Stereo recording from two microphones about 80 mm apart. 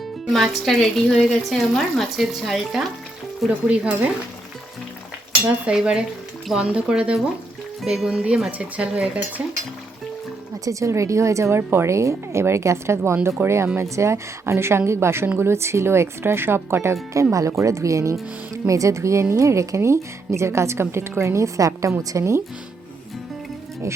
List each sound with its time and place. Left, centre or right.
0.3 s speech: centre
5.6 s speech: centre
10.7 s a woman's voice: right